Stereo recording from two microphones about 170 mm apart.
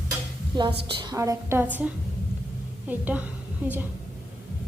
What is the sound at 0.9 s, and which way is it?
A woman's voice, 25° right (ahead or behind).